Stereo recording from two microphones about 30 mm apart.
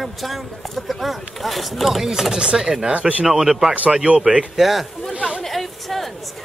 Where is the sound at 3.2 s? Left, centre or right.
Centre.